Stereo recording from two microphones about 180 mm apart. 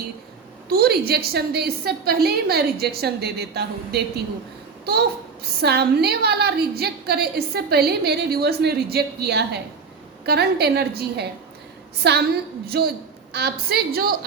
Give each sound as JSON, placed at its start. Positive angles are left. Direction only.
{"t": 0.7, "sound": "a child's voice", "side_deg": -60}